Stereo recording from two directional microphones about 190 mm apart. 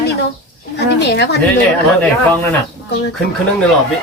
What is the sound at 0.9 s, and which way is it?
Speech, 60° left (ahead or behind).